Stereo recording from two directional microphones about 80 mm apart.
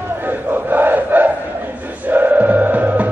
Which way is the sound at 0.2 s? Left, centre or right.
Right.